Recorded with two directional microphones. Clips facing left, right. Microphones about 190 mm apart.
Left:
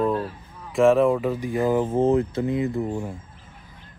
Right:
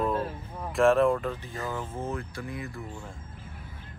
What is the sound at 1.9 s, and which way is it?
Speech, 65° left (ahead or behind).